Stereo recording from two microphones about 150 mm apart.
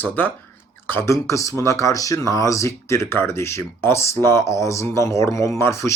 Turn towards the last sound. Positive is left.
turn(degrees=20)  # may be behind; listen again after turning